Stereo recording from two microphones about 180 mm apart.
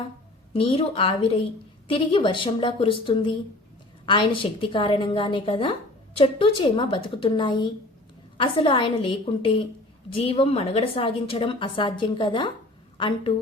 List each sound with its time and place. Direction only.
0.5 s a woman's voice: 30° left (ahead or behind)